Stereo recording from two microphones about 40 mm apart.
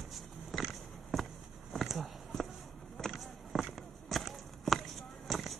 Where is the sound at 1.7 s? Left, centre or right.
Centre.